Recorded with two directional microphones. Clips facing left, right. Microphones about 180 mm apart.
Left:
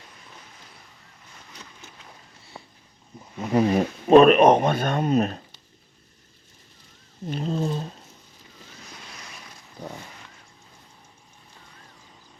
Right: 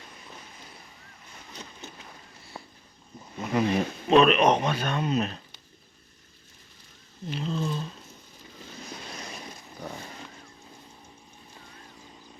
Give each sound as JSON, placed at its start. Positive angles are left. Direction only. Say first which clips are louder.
{"t": 3.5, "sound": "speech", "louder": "left 5 dB", "side_deg": 35}
{"t": 7.3, "sound": "speech", "louder": "left 4 dB", "side_deg": 45}